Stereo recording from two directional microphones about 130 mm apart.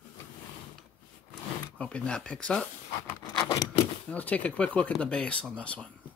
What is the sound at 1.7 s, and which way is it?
Speech, 10° left (ahead or behind).